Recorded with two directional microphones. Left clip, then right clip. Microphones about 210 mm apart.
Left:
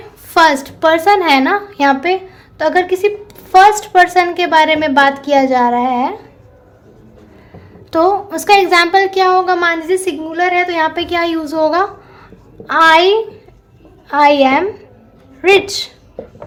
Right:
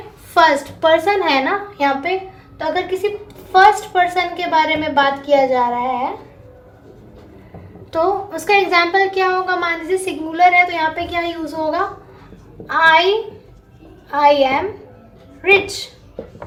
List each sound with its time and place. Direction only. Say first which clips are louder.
0.3 s a woman's voice: left 3 dB; 45° left (ahead or behind)
7.9 s a woman's voice: left 5 dB; 45° left (ahead or behind)
14.1 s a woman's voice: left 4 dB; 50° left (ahead or behind)